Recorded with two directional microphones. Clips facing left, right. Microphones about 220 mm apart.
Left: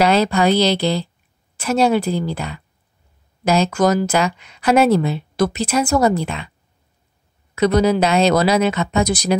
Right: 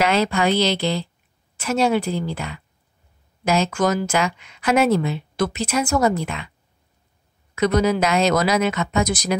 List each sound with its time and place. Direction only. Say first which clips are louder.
0.0 s speech: left 4 dB; 35° left (ahead or behind)
7.5 s speech: left 3 dB; 30° left (ahead or behind)